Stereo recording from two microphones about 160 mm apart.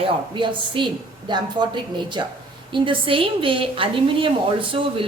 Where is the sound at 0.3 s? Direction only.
30° right (ahead or behind).